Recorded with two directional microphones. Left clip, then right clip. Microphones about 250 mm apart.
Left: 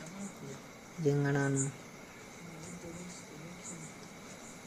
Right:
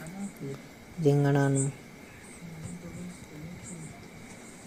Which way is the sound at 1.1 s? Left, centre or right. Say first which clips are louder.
Right 6 dB; centre.